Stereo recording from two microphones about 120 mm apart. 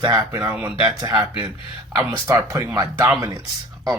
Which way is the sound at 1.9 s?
25° right (ahead or behind).